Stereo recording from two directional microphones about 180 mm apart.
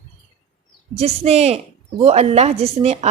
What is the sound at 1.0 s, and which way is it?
A woman's voice, 35° right (ahead or behind).